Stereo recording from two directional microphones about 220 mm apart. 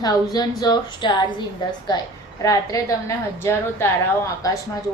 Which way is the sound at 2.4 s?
15° left (ahead or behind).